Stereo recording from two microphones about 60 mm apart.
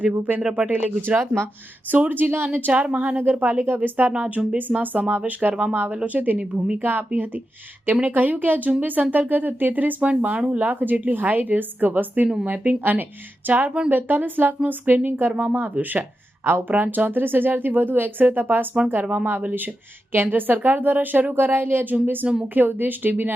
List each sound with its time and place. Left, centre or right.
0.0 s speech: right
0.4 s speech: centre
1.0 s speech: right
6.8 s speech: right
13.7 s speech: centre
13.9 s speech: right